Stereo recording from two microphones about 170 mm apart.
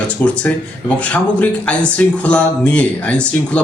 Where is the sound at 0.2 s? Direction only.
5° left (ahead or behind).